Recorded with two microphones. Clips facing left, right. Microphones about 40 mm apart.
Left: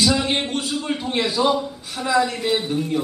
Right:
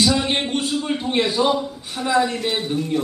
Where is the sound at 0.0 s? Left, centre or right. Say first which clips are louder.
Right 1 dB; centre.